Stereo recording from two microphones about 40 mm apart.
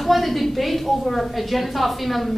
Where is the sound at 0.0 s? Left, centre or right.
Centre.